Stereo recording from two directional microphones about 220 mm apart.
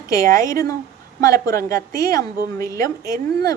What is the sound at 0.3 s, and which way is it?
A woman's voice, 15° left (ahead or behind).